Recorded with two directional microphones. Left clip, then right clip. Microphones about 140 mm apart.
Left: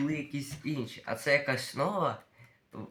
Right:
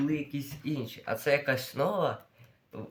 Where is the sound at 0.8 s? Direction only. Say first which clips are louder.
Right 2 dB; 45° right (ahead or behind).